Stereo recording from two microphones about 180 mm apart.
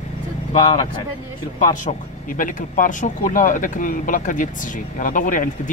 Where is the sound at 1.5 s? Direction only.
45° left (ahead or behind).